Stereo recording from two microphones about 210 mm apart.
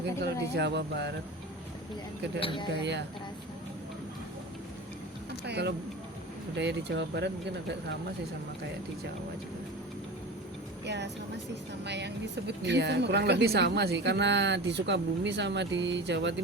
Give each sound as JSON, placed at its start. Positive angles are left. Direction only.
{"t": 0.2, "sound": "speech", "side_deg": -55}
{"t": 2.4, "sound": "speech", "side_deg": 25}
{"t": 5.5, "sound": "speech", "side_deg": -55}
{"t": 10.8, "sound": "speech", "side_deg": -55}